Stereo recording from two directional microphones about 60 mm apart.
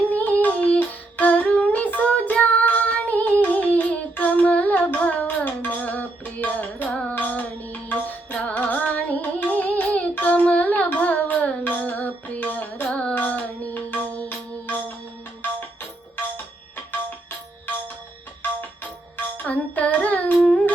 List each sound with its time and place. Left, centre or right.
0.1 s a sound: left
7.1 s music: left
18.8 s music: left